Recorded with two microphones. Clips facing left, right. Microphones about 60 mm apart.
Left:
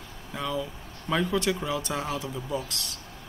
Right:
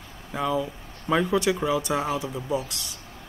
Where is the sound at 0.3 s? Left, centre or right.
Centre.